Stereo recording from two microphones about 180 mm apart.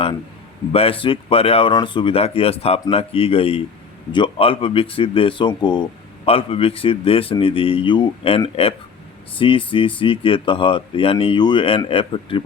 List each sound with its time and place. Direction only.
0.7 s speech: 30° left (ahead or behind)